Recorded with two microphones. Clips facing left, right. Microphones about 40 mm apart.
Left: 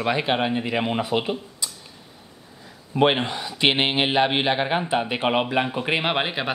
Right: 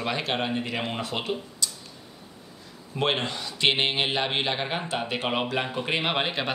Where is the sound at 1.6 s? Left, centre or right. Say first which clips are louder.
Right 1 dB; centre.